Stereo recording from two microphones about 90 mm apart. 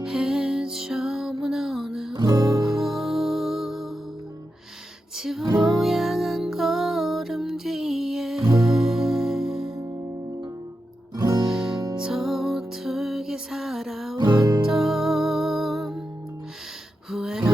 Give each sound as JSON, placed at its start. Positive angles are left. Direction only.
{"t": 0.0, "sound": "music", "side_deg": -5}
{"t": 2.1, "sound": "music", "side_deg": -45}
{"t": 2.6, "sound": "music", "side_deg": 0}
{"t": 5.1, "sound": "music", "side_deg": -5}
{"t": 9.7, "sound": "music", "side_deg": -40}
{"t": 11.1, "sound": "guitar", "side_deg": -45}
{"t": 11.4, "sound": "music", "side_deg": -5}
{"t": 17.1, "sound": "a sound", "side_deg": -5}